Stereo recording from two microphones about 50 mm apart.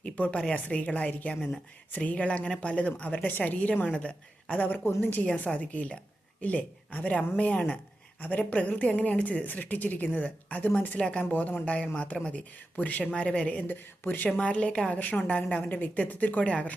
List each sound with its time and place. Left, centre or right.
0.3 s speech: centre
0.5 s a woman's voice: left
4.9 s a woman's voice: left
5.2 s a woman's voice: left
8.2 s speech: left
11.0 s a woman's voice: centre
11.3 s a woman's voice: left
13.6 s speech: left
14.3 s a woman's voice: left